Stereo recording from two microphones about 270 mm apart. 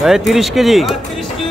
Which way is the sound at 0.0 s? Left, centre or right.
Centre.